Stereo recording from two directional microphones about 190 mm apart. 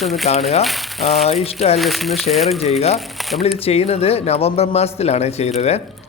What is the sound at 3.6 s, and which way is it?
Speech, 30° left (ahead or behind).